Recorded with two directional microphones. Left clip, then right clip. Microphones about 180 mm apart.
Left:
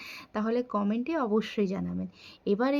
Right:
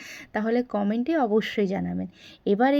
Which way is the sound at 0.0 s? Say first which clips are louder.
Right 4 dB; 25° right (ahead or behind).